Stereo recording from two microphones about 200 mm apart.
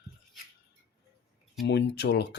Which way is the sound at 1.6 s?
55° left (ahead or behind).